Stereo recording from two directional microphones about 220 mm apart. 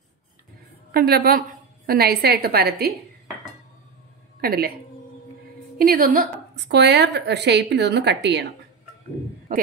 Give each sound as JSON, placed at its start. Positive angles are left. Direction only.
{"t": 0.9, "sound": "a woman's voice", "side_deg": -45}
{"t": 4.4, "sound": "a woman's voice", "side_deg": -45}
{"t": 5.8, "sound": "a woman's voice", "side_deg": -40}